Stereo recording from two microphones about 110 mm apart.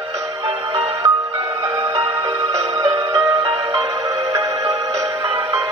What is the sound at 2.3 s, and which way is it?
Music, 35° right (ahead or behind).